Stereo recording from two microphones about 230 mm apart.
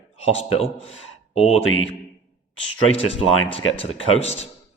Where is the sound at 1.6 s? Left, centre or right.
Left.